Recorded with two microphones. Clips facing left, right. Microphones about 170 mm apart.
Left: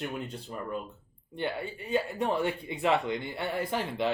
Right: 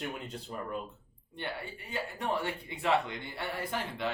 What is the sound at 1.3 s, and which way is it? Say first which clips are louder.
Speech: left 6 dB; 20° left (ahead or behind).